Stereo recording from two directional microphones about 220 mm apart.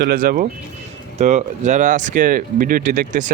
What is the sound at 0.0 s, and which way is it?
Speech, 40° right (ahead or behind).